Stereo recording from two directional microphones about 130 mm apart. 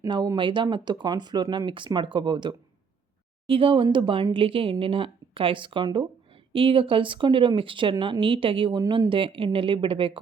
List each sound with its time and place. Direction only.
0.1 s speech: 35° right (ahead or behind)